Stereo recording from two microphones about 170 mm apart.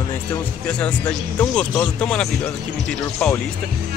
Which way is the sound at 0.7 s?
5° left (ahead or behind).